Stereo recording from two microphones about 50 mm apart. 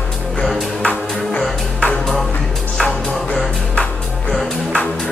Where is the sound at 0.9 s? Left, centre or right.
Left.